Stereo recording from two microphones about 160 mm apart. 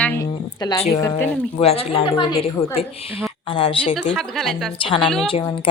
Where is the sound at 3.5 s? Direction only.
35° left (ahead or behind).